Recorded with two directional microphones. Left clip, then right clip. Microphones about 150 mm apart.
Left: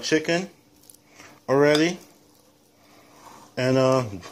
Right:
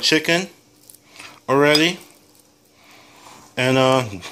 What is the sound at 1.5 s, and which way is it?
Speech, 10° left (ahead or behind).